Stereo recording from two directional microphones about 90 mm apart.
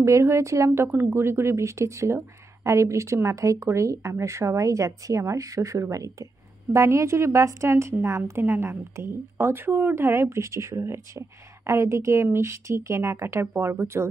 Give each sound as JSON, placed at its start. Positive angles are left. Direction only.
{"t": 0.0, "sound": "a woman's voice", "side_deg": -35}